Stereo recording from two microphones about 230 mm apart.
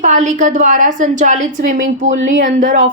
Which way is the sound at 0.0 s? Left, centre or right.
Right.